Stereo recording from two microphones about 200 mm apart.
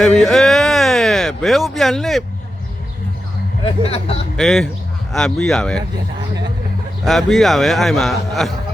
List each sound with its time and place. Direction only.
0.0 s speech: centre (ahead or behind)
3.6 s speech: 30° left (ahead or behind)
4.4 s a man's voice: centre (ahead or behind)
7.0 s a man's voice: centre (ahead or behind)